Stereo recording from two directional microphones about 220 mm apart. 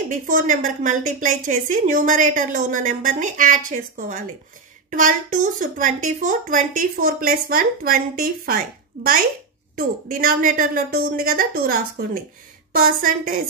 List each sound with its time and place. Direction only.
0.1 s a woman's voice: 35° right (ahead or behind)